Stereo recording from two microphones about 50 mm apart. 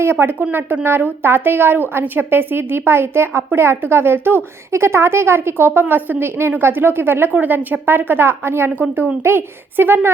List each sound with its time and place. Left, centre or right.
0.0 s a woman's voice: right
4.7 s speech: right
5.8 s a woman's voice: right
8.7 s speech: right
9.2 s a woman's voice: right